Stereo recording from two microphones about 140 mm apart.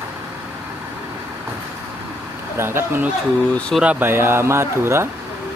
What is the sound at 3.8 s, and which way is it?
Speech, 10° right (ahead or behind).